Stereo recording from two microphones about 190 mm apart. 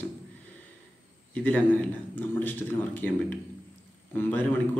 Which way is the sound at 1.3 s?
10° left (ahead or behind).